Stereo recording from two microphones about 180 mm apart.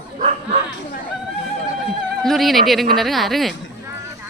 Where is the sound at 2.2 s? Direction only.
Centre (ahead or behind).